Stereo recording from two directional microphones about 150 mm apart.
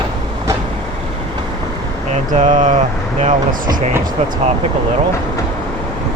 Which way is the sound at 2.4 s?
55° right (ahead or behind).